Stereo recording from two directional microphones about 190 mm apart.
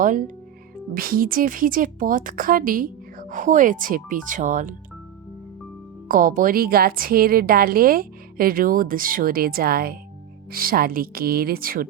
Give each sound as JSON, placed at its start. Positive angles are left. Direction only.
{"t": 0.0, "sound": "a woman's voice", "side_deg": -45}
{"t": 6.1, "sound": "a woman's voice", "side_deg": -45}